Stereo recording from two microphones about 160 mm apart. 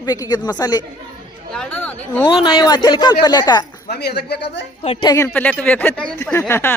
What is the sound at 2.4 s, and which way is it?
Speech, 30° left (ahead or behind).